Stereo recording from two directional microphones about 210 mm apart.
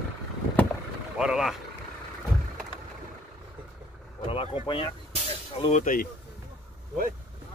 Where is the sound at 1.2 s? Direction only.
Centre (ahead or behind).